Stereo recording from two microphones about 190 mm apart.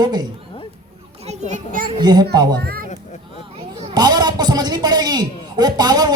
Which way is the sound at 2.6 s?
55° right (ahead or behind).